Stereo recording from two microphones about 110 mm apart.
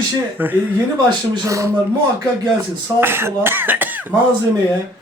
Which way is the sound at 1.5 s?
30° right (ahead or behind).